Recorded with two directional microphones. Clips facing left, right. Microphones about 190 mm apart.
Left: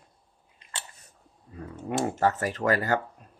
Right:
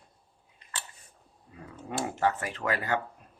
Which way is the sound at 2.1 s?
40° left (ahead or behind).